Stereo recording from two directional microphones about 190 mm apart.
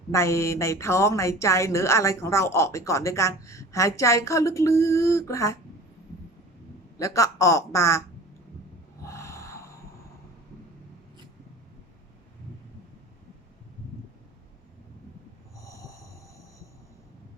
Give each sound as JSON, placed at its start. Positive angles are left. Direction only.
{"t": 0.1, "sound": "a woman's voice", "side_deg": 15}
{"t": 7.0, "sound": "a woman's voice", "side_deg": 15}
{"t": 9.0, "sound": "a sound", "side_deg": 15}
{"t": 15.5, "sound": "snoring", "side_deg": 15}